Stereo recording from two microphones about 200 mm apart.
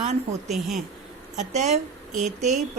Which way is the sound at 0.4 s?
Centre (ahead or behind).